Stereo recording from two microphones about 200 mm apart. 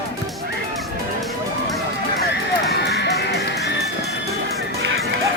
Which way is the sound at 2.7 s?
55° left (ahead or behind).